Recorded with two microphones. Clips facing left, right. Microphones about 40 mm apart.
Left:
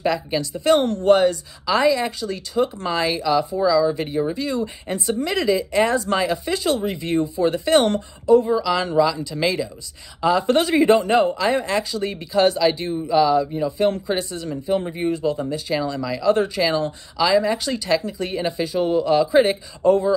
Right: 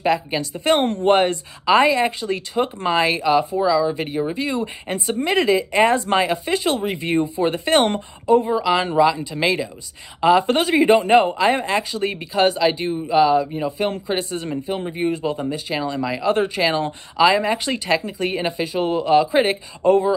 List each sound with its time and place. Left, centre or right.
0.0 s speech: right
3.5 s speech: centre
6.3 s speech: centre
6.6 s speech: right
10.4 s speech: centre
11.0 s speech: right
13.7 s speech: centre
14.3 s speech: right
14.7 s speech: centre
16.0 s speech: right
17.2 s speech: right
18.6 s speech: centre